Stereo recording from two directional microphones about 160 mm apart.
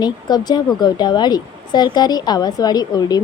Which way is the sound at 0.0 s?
25° left (ahead or behind).